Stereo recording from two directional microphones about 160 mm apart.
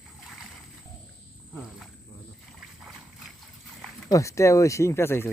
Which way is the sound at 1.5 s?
Centre (ahead or behind).